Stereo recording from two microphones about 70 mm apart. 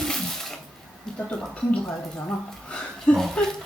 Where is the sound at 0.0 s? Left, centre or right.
Centre.